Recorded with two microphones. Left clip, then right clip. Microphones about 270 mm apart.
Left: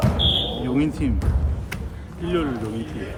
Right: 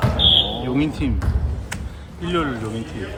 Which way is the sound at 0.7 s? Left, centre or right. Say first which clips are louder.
Right 1 dB; centre.